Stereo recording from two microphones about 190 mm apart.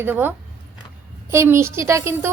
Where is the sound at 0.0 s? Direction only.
10° right (ahead or behind).